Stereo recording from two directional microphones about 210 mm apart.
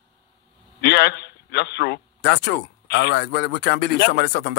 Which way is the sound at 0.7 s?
50° left (ahead or behind).